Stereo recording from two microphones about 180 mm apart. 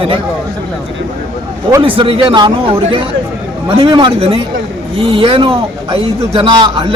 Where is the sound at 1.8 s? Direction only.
30° right (ahead or behind).